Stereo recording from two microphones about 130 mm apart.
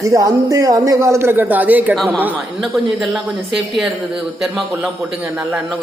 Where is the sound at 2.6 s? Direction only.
Centre (ahead or behind).